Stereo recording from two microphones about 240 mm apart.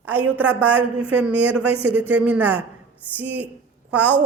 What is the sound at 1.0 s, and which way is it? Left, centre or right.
Speech, right.